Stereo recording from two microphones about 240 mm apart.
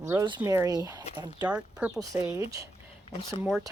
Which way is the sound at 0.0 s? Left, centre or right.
Centre.